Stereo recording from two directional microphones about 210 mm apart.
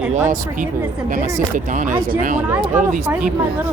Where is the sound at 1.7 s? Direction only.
40° right (ahead or behind).